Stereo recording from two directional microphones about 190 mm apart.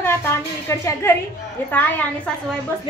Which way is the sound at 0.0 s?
15° left (ahead or behind).